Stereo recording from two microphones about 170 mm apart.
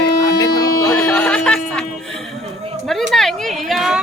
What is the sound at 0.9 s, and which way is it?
Speech, 5° left (ahead or behind).